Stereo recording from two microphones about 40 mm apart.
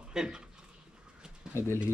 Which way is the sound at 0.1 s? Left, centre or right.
Centre.